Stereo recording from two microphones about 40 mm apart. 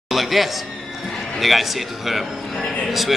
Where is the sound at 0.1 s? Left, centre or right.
Centre.